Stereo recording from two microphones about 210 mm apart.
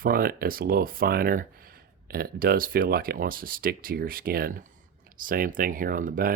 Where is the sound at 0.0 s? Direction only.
45° right (ahead or behind).